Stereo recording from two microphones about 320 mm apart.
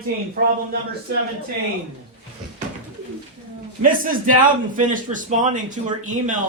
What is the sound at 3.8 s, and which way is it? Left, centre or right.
Speech, right.